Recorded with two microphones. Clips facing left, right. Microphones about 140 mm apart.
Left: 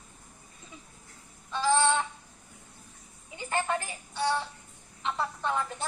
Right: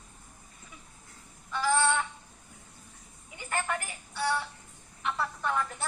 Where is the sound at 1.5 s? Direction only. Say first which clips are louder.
Left 2 dB; 25° left (ahead or behind).